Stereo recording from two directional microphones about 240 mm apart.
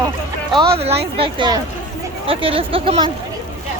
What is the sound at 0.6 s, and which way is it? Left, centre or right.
A woman's voice, right.